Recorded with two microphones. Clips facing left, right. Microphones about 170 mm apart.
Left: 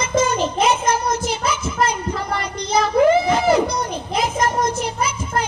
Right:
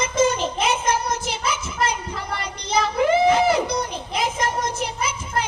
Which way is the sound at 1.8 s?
45° left (ahead or behind).